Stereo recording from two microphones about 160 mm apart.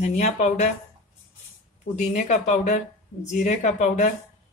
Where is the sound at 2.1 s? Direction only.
50° left (ahead or behind).